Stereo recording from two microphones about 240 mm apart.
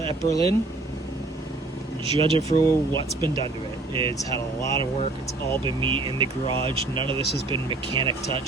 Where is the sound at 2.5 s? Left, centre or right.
Left.